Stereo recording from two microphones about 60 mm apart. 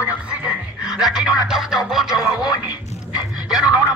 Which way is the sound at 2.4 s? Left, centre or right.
Left.